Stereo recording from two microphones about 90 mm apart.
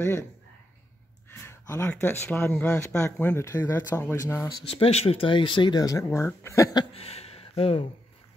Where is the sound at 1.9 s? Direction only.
20° left (ahead or behind).